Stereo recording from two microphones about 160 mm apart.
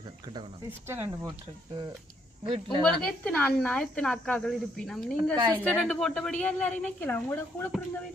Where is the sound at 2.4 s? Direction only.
30° right (ahead or behind).